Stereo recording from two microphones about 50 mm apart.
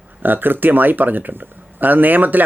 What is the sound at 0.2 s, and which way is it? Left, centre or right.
Speech, right.